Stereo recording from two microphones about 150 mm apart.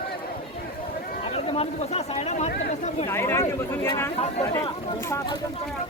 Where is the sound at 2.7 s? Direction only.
50° left (ahead or behind).